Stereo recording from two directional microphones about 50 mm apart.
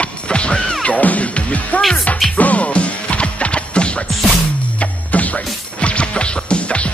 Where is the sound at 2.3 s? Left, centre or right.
Left.